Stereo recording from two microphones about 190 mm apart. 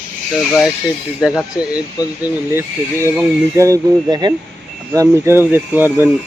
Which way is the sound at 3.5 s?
15° right (ahead or behind).